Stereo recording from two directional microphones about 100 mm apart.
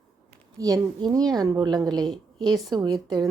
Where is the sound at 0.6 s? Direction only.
40° right (ahead or behind).